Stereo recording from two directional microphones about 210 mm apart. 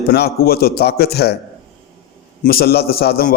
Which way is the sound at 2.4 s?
45° left (ahead or behind).